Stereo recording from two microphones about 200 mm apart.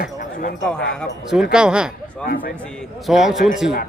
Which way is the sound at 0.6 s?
5° left (ahead or behind).